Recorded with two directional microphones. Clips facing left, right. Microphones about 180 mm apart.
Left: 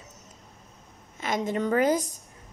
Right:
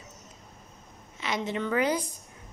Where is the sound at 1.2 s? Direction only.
45° left (ahead or behind).